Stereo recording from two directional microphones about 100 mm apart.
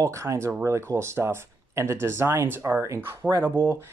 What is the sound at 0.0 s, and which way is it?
Speech, 30° right (ahead or behind).